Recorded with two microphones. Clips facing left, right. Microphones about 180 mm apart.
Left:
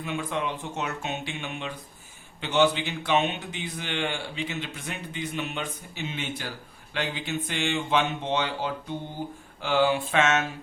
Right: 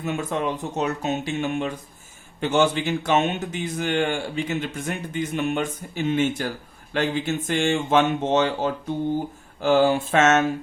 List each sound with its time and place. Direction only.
0.0 s a man's voice: 45° right (ahead or behind)